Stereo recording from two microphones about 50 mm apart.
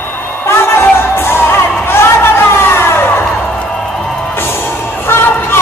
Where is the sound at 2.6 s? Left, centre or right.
Left.